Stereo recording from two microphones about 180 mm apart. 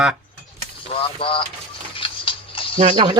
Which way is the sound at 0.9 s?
30° left (ahead or behind).